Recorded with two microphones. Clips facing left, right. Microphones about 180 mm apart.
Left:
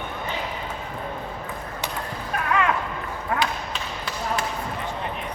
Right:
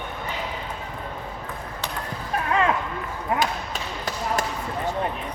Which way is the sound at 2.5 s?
30° right (ahead or behind).